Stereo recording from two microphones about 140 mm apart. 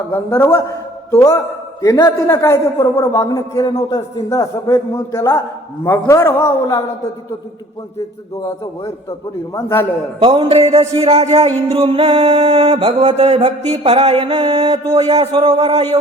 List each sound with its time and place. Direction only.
0.1 s a man's voice: 15° left (ahead or behind)
8.4 s a man's voice: 25° left (ahead or behind)
10.2 s music: 40° right (ahead or behind)